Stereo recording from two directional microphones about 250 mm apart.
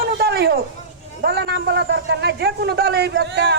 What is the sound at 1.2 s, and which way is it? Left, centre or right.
A man's voice, right.